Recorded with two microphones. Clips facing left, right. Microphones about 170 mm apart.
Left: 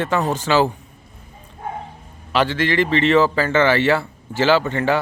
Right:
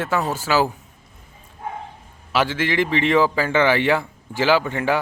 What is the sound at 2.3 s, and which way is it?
A man's voice, 10° right (ahead or behind).